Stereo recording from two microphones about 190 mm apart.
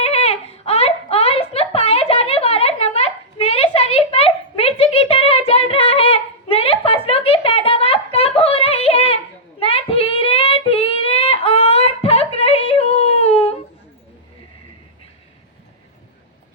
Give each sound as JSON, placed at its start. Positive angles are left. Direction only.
{"t": 0.0, "sound": "baby cry", "side_deg": 35}
{"t": 9.6, "sound": "child singing", "side_deg": 30}